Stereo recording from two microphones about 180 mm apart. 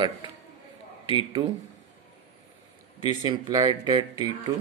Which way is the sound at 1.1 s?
25° right (ahead or behind).